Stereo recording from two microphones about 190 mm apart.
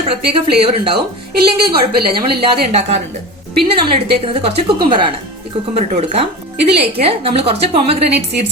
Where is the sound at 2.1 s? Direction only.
30° right (ahead or behind).